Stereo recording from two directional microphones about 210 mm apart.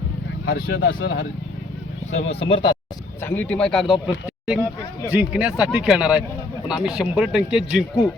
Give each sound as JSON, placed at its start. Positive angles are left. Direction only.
{"t": 0.6, "sound": "speech", "side_deg": 70}
{"t": 2.1, "sound": "speech", "side_deg": 30}
{"t": 3.2, "sound": "speech", "side_deg": 10}